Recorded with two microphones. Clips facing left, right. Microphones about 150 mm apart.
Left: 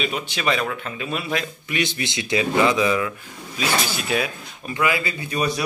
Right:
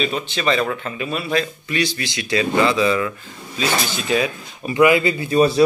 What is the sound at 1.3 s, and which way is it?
Speech, 20° left (ahead or behind).